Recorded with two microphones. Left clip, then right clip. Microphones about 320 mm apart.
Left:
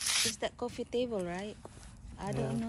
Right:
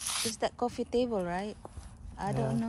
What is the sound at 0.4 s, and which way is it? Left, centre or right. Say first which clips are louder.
Speech: right 5 dB; centre.